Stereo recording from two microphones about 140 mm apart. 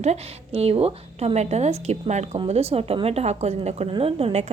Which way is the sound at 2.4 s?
45° right (ahead or behind).